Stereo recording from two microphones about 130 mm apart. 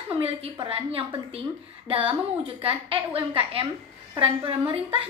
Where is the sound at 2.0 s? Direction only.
45° right (ahead or behind).